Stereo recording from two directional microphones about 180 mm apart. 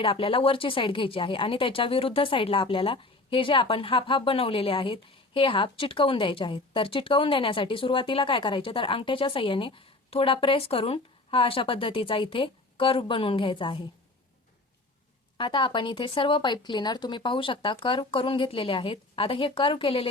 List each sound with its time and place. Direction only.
0.0 s speech: 30° left (ahead or behind)
15.4 s speech: 25° left (ahead or behind)